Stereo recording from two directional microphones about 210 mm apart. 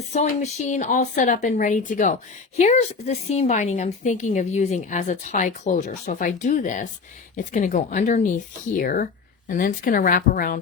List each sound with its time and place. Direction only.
0.1 s a woman's voice: 35° left (ahead or behind)